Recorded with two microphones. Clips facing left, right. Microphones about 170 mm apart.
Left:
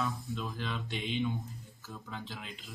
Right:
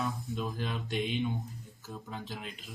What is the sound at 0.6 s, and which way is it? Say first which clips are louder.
Speech: right 4 dB; 45° right (ahead or behind).